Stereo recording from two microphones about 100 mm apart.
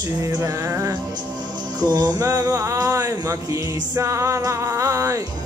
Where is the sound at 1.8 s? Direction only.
45° right (ahead or behind).